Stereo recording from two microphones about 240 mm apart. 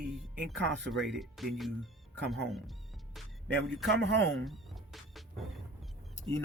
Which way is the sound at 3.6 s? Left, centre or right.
Centre.